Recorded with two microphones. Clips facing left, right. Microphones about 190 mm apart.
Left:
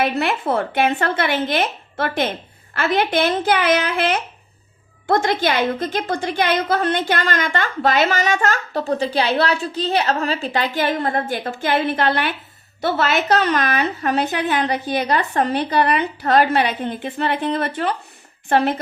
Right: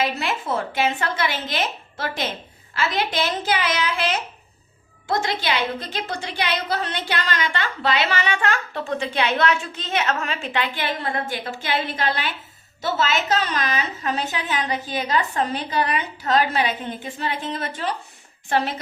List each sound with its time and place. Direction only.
0.0 s a woman's voice: 60° left (ahead or behind)